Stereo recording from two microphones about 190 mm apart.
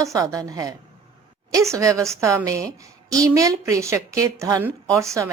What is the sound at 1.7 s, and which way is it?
A woman's voice, 15° right (ahead or behind).